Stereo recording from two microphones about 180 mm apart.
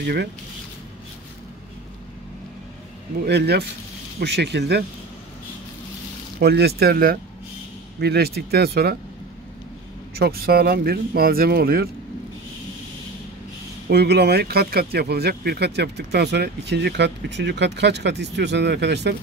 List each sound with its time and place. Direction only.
0.0 s speech: 65° right (ahead or behind)
3.2 s speech: 65° right (ahead or behind)
6.4 s speech: 60° right (ahead or behind)
10.1 s speech: 60° right (ahead or behind)
13.8 s speech: 65° right (ahead or behind)